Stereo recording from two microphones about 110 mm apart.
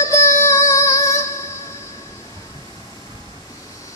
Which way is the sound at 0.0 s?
30° left (ahead or behind).